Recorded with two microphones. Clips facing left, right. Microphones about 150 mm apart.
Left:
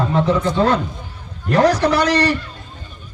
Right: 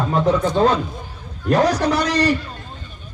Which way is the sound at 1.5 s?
65° left (ahead or behind).